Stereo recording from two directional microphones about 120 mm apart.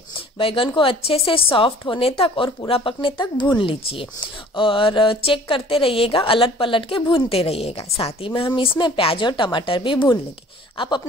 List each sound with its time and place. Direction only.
0.4 s a woman's voice: 50° left (ahead or behind)